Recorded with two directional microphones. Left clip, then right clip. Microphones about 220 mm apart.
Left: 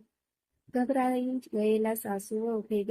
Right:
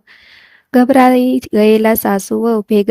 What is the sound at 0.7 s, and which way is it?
Speech, 50° right (ahead or behind).